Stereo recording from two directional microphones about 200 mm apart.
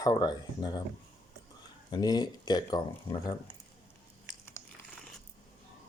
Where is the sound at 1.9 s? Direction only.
20° left (ahead or behind).